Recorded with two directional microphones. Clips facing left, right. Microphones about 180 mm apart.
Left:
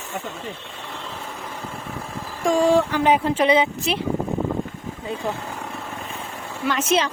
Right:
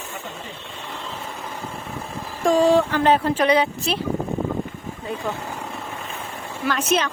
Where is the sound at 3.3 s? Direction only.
20° left (ahead or behind).